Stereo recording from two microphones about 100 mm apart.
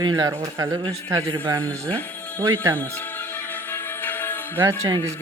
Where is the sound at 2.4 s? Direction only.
25° right (ahead or behind).